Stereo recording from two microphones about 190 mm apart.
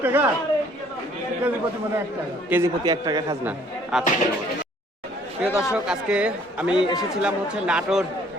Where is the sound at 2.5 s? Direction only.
15° right (ahead or behind).